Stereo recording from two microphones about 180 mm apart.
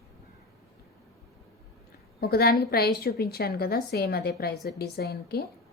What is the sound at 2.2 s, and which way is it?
A woman's voice, 60° left (ahead or behind).